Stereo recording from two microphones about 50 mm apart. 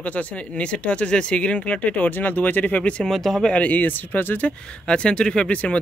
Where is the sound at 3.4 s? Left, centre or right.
Left.